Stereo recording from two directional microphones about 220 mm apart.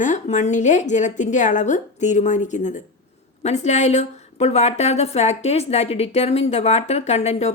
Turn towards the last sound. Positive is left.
turn(degrees=30)  # may be behind; listen again after turning